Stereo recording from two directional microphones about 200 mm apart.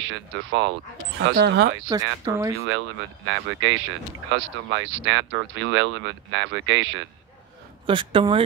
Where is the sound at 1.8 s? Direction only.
20° right (ahead or behind).